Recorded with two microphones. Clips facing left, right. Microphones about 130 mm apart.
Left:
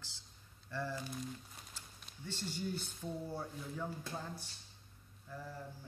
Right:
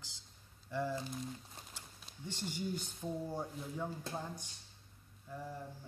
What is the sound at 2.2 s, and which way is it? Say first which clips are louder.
Speech: right 1 dB; 15° right (ahead or behind).